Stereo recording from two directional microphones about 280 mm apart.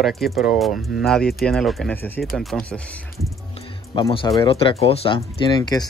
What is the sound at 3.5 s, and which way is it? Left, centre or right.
Music, centre.